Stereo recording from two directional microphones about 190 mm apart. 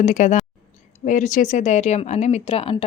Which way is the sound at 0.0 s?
40° left (ahead or behind).